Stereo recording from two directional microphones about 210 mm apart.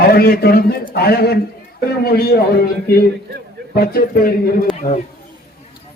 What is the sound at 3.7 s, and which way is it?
Speech, 45° left (ahead or behind).